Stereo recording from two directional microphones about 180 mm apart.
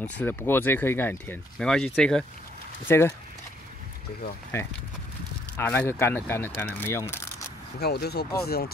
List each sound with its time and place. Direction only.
0.2 s speech: 10° left (ahead or behind)
5.6 s speech: 10° left (ahead or behind)
7.8 s speech: 65° left (ahead or behind)